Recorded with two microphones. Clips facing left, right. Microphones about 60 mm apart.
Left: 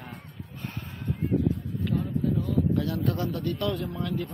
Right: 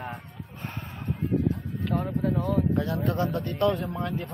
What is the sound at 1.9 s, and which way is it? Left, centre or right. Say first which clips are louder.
Speech: right 1 dB; right.